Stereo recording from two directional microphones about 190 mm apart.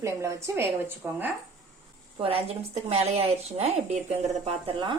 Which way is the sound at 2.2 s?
30° right (ahead or behind).